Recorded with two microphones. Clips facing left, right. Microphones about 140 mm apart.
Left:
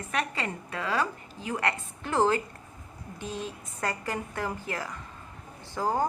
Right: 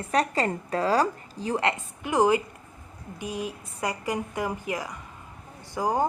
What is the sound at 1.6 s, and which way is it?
A woman's voice, 15° right (ahead or behind).